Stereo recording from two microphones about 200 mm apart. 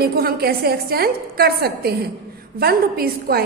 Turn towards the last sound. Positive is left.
turn(degrees=-50)  # may be behind; listen again after turning